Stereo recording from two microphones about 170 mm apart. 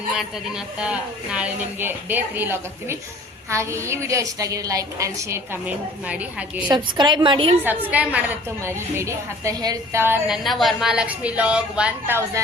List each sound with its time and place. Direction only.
0.1 s a woman's voice: 5° right (ahead or behind)
6.7 s a woman's voice: 25° right (ahead or behind)
7.9 s a woman's voice: 10° right (ahead or behind)
10.3 s a woman's voice: centre (ahead or behind)